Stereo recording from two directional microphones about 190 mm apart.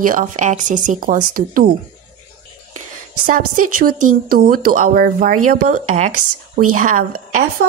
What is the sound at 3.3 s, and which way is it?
Speech, 45° right (ahead or behind).